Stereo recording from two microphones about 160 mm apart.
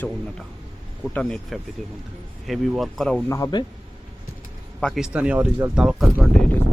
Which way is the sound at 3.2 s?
20° left (ahead or behind).